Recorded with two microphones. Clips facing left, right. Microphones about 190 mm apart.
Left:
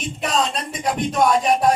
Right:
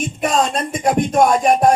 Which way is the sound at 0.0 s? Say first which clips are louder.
Right 4 dB; 50° right (ahead or behind).